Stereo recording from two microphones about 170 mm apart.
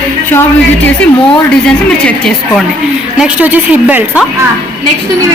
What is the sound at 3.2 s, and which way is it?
A woman's voice, 10° right (ahead or behind).